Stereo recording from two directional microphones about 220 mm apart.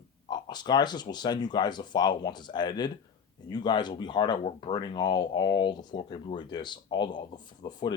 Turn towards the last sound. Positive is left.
turn(degrees=20)  # may be behind; listen again after turning